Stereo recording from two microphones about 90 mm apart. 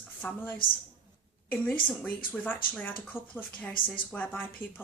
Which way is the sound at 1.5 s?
15° left (ahead or behind).